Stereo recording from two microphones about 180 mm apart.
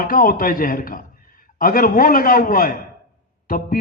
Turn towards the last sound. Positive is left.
turn(degrees=50)  # may be behind; listen again after turning